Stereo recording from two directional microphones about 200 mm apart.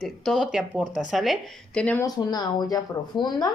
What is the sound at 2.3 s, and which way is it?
Speech, 20° left (ahead or behind).